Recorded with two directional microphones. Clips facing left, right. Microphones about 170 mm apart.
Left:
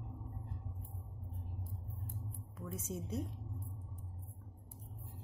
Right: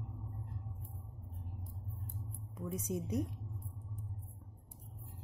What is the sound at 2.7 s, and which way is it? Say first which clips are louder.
Speech: right 4 dB; 15° right (ahead or behind).